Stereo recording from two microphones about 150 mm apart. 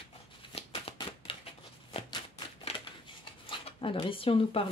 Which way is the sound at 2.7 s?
45° left (ahead or behind).